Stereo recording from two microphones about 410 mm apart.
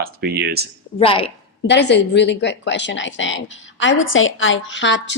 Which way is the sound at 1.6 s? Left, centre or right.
Left.